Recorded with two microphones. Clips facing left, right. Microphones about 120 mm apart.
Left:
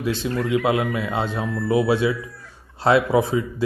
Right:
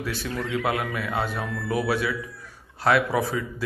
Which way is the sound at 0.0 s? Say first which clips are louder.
Left 6 dB; 20° left (ahead or behind).